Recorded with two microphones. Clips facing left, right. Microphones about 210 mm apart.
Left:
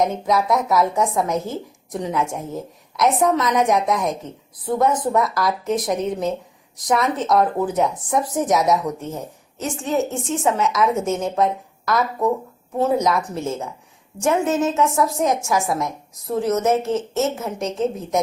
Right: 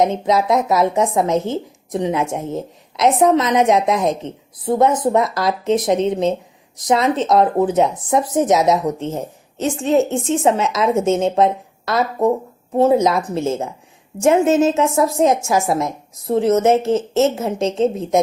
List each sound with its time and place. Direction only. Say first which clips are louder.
0.0 s speech: right 3 dB; 25° right (ahead or behind)